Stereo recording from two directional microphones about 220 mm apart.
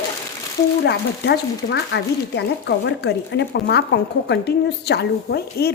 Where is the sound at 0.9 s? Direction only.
50° left (ahead or behind).